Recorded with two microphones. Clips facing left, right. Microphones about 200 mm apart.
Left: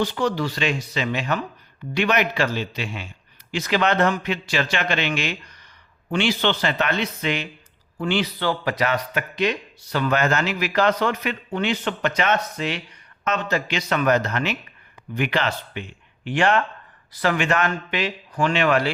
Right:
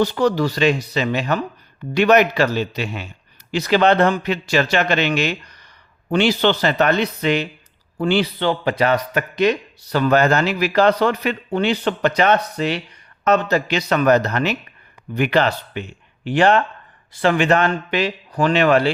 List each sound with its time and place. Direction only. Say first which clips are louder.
0.0 s speech: right 5 dB; 40° right (ahead or behind)
8.4 s a man's voice: right 4 dB; 25° right (ahead or behind)
9.1 s speech: right 6 dB; 40° right (ahead or behind)